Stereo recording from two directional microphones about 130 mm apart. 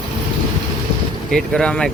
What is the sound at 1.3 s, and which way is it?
Speech, 5° left (ahead or behind).